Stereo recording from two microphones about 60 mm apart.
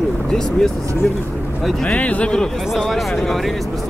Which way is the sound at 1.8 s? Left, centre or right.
Left.